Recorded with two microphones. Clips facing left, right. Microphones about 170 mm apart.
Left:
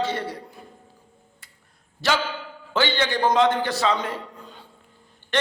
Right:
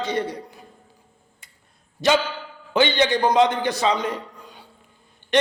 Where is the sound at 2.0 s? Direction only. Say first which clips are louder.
Right 4 dB; 20° right (ahead or behind).